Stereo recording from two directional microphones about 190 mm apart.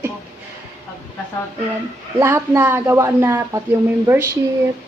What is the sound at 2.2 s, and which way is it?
Speech, 10° right (ahead or behind).